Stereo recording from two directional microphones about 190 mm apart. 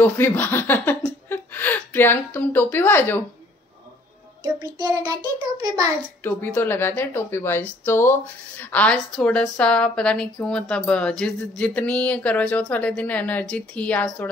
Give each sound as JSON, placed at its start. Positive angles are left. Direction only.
{"t": 0.0, "sound": "speech", "side_deg": 10}
{"t": 4.4, "sound": "a child's voice", "side_deg": -20}
{"t": 6.2, "sound": "speech", "side_deg": 10}